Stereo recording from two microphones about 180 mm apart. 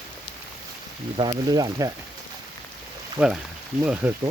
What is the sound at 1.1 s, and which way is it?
Speech, 30° right (ahead or behind).